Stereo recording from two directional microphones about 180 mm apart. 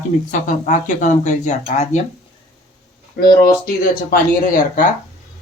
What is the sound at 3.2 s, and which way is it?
Speech, 55° left (ahead or behind).